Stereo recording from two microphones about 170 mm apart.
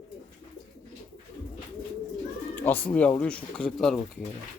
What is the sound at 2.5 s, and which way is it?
Speech, 10° left (ahead or behind).